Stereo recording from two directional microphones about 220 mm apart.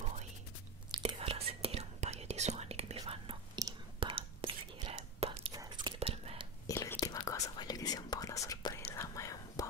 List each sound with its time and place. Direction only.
0.9 s whispering: 25° right (ahead or behind)
5.5 s whispering: 15° right (ahead or behind)
5.9 s whispering: 25° right (ahead or behind)
6.7 s whispering: 15° left (ahead or behind)